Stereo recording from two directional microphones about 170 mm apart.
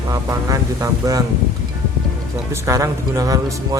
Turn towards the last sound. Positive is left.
turn(degrees=-20)  # may be behind; listen again after turning